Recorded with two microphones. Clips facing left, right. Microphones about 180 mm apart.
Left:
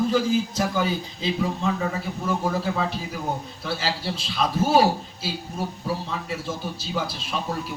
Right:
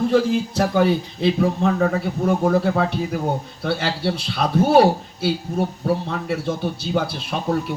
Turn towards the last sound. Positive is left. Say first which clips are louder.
# right 5 dB
turn(degrees=-60)  # may be behind; listen again after turning